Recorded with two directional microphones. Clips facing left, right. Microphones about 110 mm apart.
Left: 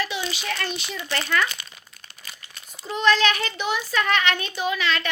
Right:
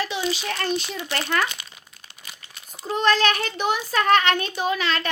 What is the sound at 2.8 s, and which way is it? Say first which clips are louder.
A child's voice: even; 45° right (ahead or behind).